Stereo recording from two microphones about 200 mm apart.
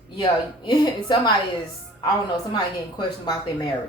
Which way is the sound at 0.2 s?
20° left (ahead or behind).